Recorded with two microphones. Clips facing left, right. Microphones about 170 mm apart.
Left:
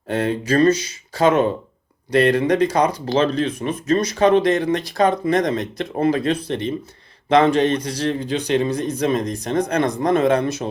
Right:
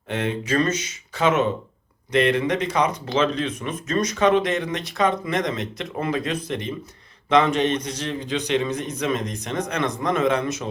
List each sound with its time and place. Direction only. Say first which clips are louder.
0.1 s speech: left 4 dB; 35° left (ahead or behind)